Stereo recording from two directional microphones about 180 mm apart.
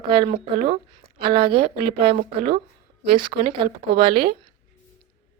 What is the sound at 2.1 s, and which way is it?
Speech, 55° right (ahead or behind).